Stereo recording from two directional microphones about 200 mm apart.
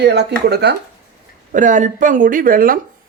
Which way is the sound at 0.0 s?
55° right (ahead or behind).